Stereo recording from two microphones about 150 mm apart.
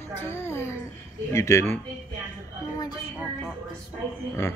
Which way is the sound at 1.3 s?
20° left (ahead or behind).